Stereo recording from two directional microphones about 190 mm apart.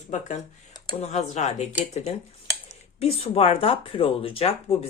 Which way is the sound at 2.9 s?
30° left (ahead or behind).